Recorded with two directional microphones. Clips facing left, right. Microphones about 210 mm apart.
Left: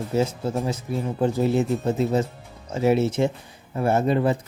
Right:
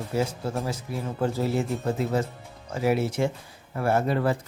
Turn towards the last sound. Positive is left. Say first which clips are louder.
# left 3 dB
turn(degrees=20)  # may be behind; listen again after turning